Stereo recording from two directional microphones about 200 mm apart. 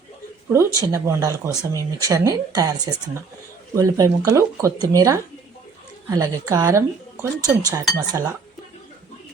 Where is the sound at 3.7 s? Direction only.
15° right (ahead or behind).